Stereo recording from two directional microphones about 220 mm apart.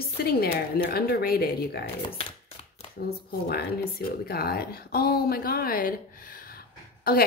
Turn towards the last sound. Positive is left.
turn(degrees=45)  # may be behind; listen again after turning